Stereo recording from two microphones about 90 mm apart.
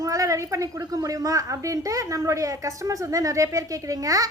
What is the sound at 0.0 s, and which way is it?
A woman's voice, 40° right (ahead or behind).